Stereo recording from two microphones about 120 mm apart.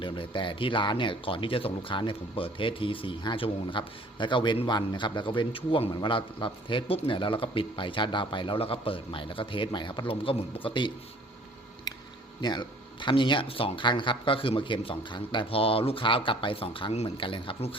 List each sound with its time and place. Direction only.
0.0 s speech: 45° left (ahead or behind)
11.9 s a sound: 30° left (ahead or behind)
12.4 s speech: 40° left (ahead or behind)